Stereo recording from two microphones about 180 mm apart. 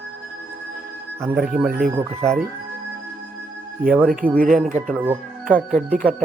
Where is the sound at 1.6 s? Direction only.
55° right (ahead or behind).